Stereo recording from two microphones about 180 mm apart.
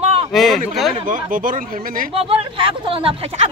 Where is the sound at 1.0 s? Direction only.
50° right (ahead or behind).